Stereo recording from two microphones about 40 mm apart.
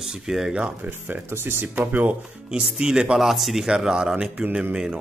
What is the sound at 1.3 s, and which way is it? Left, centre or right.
Speech, right.